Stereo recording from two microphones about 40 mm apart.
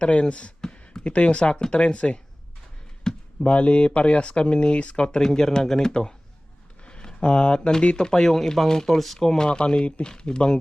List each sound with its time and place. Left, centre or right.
0.0 s speech: left
0.6 s a sound: left
1.7 s speech: left
3.1 s a sound: centre
3.4 s speech: left; by 9.5 s centre
9.5 s speech: left